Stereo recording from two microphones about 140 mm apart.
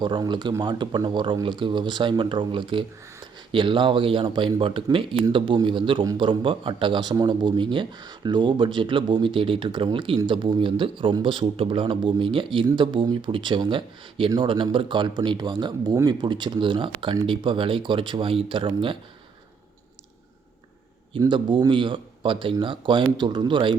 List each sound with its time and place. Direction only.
0.0 s speech: 35° right (ahead or behind)
21.2 s speech: 35° right (ahead or behind)